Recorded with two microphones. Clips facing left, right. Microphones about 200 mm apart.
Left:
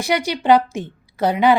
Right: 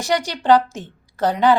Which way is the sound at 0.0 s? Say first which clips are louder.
Left 1 dB; 10° left (ahead or behind).